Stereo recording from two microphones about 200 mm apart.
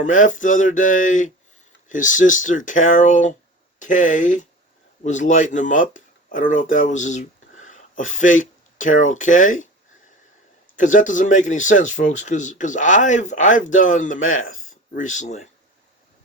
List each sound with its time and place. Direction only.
0.0 s speech: 40° left (ahead or behind)
10.8 s speech: 40° left (ahead or behind)